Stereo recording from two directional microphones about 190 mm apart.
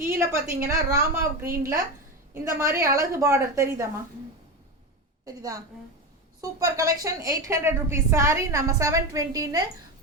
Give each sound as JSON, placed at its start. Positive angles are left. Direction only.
{"t": 0.0, "sound": "a woman's voice", "side_deg": -15}
{"t": 5.2, "sound": "a woman's voice", "side_deg": -20}